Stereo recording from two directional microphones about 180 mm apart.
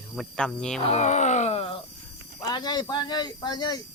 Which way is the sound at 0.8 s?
35° left (ahead or behind).